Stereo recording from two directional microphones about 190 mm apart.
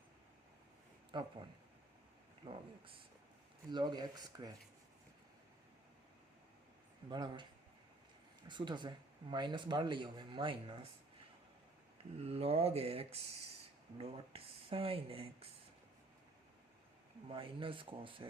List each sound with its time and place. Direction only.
1.1 s speech: 25° right (ahead or behind)
2.5 s speech: 25° right (ahead or behind)
7.1 s speech: 25° right (ahead or behind)
8.4 s speech: 25° right (ahead or behind)
12.1 s speech: 35° right (ahead or behind)
17.2 s speech: 30° right (ahead or behind)